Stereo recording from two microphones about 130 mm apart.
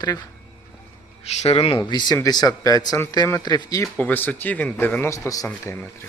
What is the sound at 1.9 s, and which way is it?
Speech, 35° left (ahead or behind).